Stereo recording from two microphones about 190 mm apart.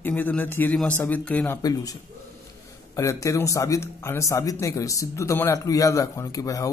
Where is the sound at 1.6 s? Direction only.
20° left (ahead or behind).